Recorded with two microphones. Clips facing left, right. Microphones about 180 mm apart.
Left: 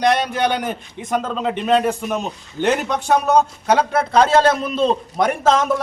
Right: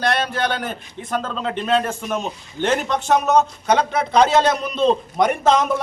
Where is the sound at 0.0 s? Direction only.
15° left (ahead or behind).